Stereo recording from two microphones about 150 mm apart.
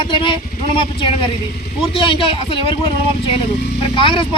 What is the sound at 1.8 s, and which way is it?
A man's voice, 35° left (ahead or behind).